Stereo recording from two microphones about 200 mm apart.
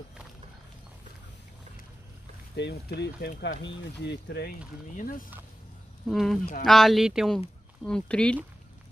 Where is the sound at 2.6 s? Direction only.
55° left (ahead or behind).